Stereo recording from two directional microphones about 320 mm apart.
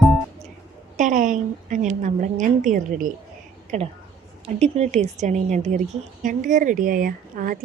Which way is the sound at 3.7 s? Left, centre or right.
Right.